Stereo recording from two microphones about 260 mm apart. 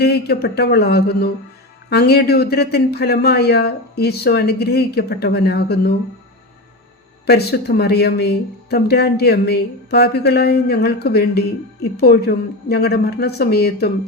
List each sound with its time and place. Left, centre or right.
0.0 s speech: left
7.3 s speech: left